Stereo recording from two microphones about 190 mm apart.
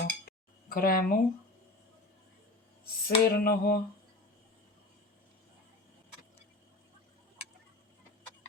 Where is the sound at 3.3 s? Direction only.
55° left (ahead or behind).